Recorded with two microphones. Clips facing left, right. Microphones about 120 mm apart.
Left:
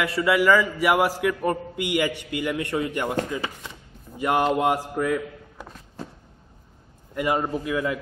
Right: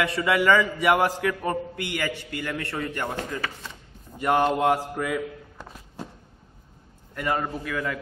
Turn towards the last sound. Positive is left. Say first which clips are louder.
# left 4 dB
turn(degrees=15)  # may be behind; listen again after turning